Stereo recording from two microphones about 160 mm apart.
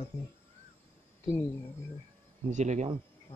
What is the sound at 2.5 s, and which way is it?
Speech, 45° right (ahead or behind).